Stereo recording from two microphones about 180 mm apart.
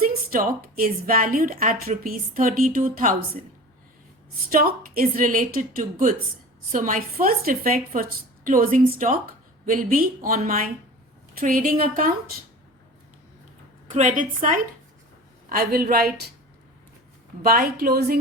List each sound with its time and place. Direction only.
0.0 s a woman's voice: 55° right (ahead or behind)
4.5 s a woman's voice: 50° right (ahead or behind)
13.8 s a woman's voice: 45° right (ahead or behind); by 16.3 s 60° right (ahead or behind)
17.4 s a woman's voice: 55° right (ahead or behind)